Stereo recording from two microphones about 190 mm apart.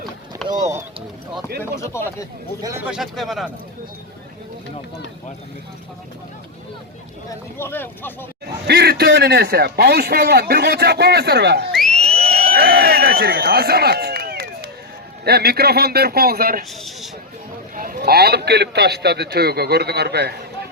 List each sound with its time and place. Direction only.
0.4 s a sound: centre (ahead or behind)
1.8 s speech: 15° left (ahead or behind)
2.6 s speech: 20° right (ahead or behind)
2.8 s speech: 5° right (ahead or behind)
7.3 s speech: 10° left (ahead or behind)
8.6 s a man's voice: 60° right (ahead or behind)
11.7 s a sound: centre (ahead or behind)
12.0 s a sound: 30° right (ahead or behind)
12.5 s a man's voice: 55° right (ahead or behind)
17.7 s a man's voice: 50° right (ahead or behind)